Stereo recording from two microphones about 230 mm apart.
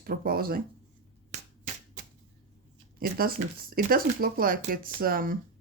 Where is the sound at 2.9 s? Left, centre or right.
Right.